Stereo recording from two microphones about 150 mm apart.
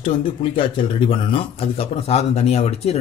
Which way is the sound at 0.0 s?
35° left (ahead or behind).